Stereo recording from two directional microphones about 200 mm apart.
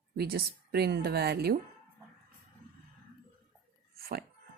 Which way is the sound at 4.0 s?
50° right (ahead or behind).